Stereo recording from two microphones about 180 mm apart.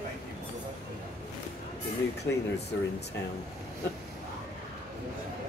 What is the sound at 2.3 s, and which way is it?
Speech, 85° left.